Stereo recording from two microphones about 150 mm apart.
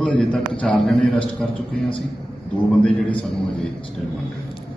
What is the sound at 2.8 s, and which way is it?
Speech, 5° left (ahead or behind).